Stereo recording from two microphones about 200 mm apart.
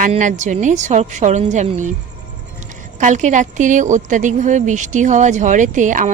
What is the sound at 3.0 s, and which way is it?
A woman's voice, 40° right (ahead or behind).